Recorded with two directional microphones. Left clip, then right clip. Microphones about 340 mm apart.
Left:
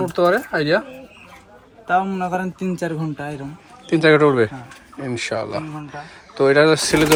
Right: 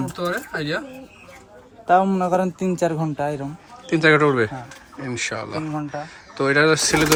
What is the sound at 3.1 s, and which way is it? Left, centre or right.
A man's voice, centre.